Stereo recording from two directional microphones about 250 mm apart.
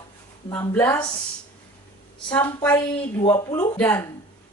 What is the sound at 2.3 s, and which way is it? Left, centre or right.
A woman's voice, centre.